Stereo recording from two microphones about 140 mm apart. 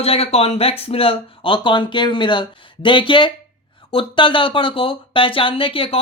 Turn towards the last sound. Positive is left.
turn(degrees=40)  # may be behind; listen again after turning